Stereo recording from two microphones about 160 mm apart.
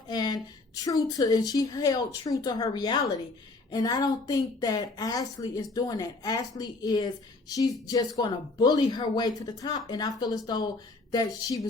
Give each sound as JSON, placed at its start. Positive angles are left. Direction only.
{"t": 0.1, "sound": "speech", "side_deg": 25}